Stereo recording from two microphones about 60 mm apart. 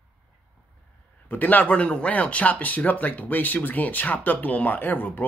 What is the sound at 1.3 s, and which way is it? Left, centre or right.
Speech, left.